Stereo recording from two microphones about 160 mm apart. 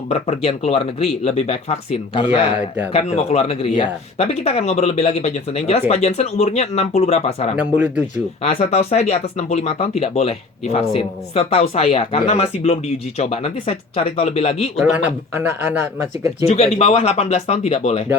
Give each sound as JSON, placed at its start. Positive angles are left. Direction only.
{"t": 0.1, "sound": "speech", "side_deg": 40}
{"t": 7.5, "sound": "a man's voice", "side_deg": -10}
{"t": 8.1, "sound": "speech", "side_deg": 40}
{"t": 14.8, "sound": "a man's voice", "side_deg": -10}
{"t": 16.5, "sound": "speech", "side_deg": 40}